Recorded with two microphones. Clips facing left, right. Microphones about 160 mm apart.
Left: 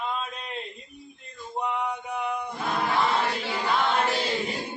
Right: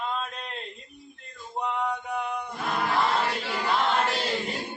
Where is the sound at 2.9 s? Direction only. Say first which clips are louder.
Even; 5° left (ahead or behind).